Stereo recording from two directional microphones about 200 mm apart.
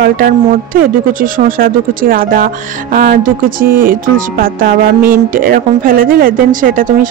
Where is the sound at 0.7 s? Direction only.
45° right (ahead or behind).